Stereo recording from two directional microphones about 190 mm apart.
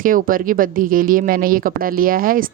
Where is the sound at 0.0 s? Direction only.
45° right (ahead or behind).